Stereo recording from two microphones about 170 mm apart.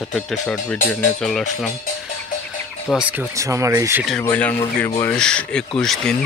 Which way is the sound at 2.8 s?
5° right (ahead or behind).